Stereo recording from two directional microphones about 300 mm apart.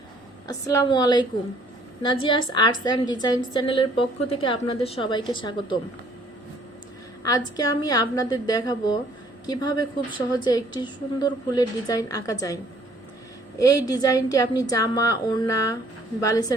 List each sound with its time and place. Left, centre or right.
0.4 s a woman's voice: centre
7.2 s a woman's voice: centre
13.6 s a woman's voice: centre